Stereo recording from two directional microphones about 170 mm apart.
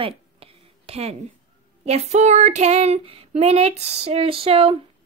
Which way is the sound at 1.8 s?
40° right (ahead or behind).